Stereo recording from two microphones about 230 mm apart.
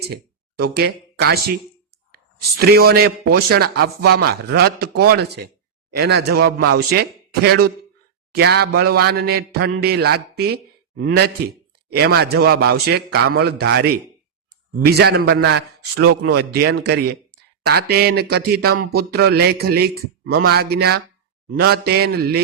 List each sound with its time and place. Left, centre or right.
0.0 s a man's voice: right